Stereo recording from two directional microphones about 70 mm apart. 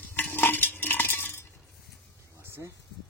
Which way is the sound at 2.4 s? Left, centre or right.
Right.